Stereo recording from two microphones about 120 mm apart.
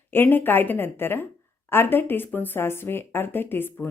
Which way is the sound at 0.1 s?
15° left (ahead or behind).